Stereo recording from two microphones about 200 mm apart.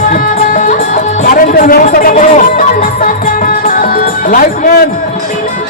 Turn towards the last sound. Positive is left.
turn(degrees=45)  # may be behind; listen again after turning